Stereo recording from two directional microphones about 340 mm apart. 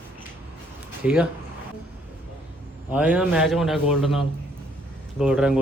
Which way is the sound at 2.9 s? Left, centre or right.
Centre.